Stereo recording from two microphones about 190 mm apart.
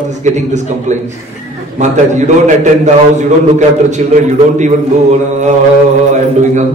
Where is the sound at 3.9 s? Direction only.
40° right (ahead or behind).